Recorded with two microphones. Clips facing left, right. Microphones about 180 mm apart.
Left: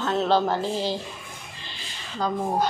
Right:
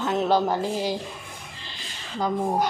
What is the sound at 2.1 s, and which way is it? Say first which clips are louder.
Speech: right 1 dB; 20° right (ahead or behind).